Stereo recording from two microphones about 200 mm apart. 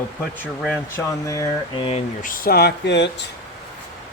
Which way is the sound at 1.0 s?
15° left (ahead or behind).